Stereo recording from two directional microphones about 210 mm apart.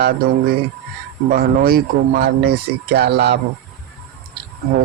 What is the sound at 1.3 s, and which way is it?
Speech, 45° right (ahead or behind).